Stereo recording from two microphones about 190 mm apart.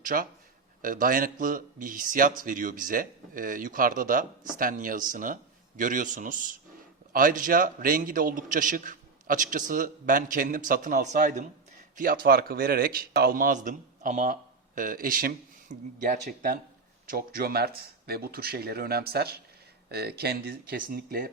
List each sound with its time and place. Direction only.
0.0 s a man's voice: 45° right (ahead or behind)